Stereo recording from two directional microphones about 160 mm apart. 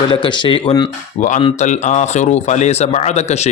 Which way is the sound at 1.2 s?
50° left (ahead or behind).